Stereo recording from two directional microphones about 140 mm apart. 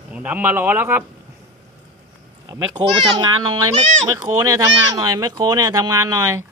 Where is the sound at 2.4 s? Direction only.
20° right (ahead or behind).